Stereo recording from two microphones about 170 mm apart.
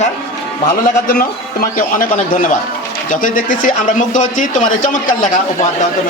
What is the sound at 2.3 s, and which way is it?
Speech, 50° left (ahead or behind).